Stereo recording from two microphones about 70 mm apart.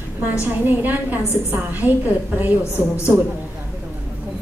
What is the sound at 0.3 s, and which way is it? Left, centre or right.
A woman's voice, right.